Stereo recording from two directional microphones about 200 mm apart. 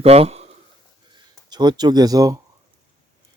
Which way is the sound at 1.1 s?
20° right (ahead or behind).